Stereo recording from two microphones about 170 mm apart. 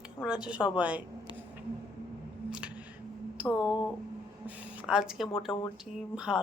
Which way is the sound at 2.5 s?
5° right (ahead or behind).